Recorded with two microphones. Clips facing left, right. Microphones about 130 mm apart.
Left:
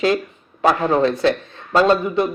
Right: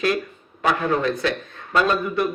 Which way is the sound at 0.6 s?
30° left (ahead or behind).